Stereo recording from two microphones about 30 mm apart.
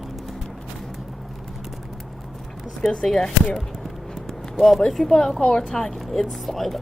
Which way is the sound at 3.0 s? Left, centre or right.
Left.